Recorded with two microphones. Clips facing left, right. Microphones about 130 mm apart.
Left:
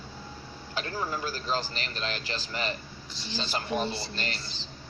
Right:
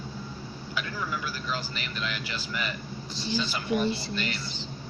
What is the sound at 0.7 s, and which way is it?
A man's voice, 40° left (ahead or behind).